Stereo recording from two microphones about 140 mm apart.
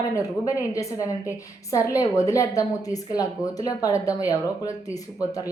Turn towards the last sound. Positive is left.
turn(degrees=25)  # may be behind; listen again after turning